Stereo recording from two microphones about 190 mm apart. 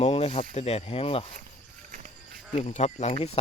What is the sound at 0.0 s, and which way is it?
Snake, 30° left (ahead or behind).